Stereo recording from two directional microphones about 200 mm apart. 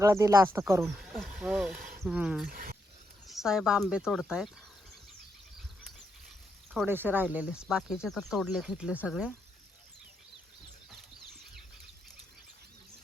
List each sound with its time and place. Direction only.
0.0 s speech: 15° right (ahead or behind)
2.5 s speech: 45° right (ahead or behind)
3.2 s speech: centre (ahead or behind)
6.8 s speech: 10° right (ahead or behind)